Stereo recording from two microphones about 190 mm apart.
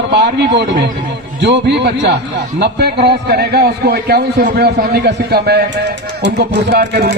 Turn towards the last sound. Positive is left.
turn(degrees=-60)  # may be behind; listen again after turning